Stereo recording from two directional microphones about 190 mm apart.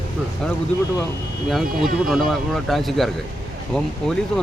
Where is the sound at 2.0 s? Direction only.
Centre (ahead or behind).